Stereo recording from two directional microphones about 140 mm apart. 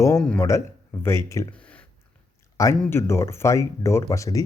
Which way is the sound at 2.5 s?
20° left (ahead or behind).